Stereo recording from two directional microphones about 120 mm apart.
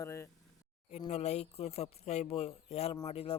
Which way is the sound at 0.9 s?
60° left (ahead or behind).